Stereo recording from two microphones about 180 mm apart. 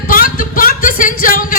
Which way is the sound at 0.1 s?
50° left (ahead or behind).